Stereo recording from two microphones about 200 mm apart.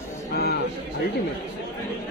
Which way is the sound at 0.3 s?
50° left (ahead or behind).